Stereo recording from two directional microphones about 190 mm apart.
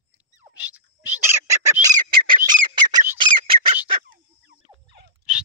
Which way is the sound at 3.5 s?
50° right (ahead or behind).